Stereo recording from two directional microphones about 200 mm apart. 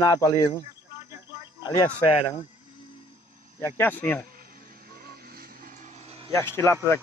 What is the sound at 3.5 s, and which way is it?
Speech, 10° left (ahead or behind).